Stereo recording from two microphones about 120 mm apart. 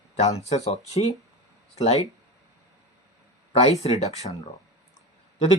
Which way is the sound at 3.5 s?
65° left (ahead or behind).